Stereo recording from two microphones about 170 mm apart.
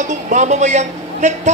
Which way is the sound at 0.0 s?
45° right (ahead or behind).